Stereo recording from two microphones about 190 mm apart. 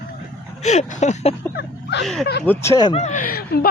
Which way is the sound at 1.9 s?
65° left (ahead or behind).